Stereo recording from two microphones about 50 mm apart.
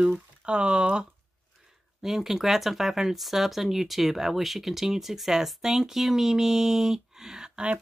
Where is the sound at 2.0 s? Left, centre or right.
Centre.